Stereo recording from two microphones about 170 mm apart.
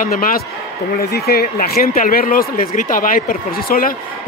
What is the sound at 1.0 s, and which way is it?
Speech, 70° left (ahead or behind).